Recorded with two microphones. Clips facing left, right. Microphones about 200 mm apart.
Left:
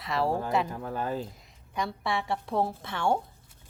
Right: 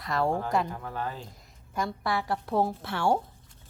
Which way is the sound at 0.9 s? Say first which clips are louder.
Left 4 dB; 45° left (ahead or behind).